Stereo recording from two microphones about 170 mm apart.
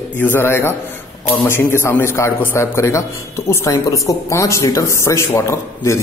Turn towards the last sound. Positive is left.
turn(degrees=15)  # may be behind; listen again after turning